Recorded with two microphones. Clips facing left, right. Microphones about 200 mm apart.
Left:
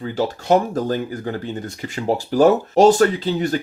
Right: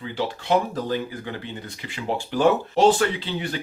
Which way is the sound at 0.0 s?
45° left (ahead or behind).